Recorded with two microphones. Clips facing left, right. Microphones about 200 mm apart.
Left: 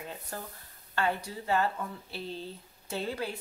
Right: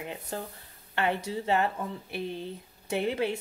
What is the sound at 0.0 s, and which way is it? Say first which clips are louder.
Speech: right 4 dB; 20° right (ahead or behind).